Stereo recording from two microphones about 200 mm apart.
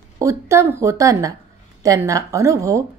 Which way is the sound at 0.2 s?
15° right (ahead or behind).